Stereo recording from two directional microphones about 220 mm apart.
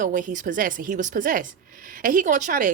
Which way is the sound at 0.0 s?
35° right (ahead or behind).